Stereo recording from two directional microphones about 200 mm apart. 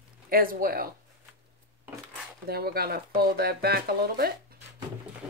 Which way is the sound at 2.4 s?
50° right (ahead or behind).